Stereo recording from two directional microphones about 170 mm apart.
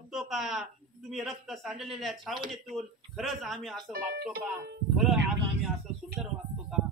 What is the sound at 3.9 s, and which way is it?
Speech, 60° right (ahead or behind).